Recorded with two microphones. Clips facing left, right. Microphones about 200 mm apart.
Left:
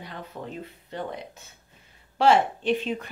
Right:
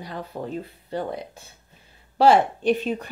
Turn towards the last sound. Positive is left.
turn(degrees=-40)  # may be behind; listen again after turning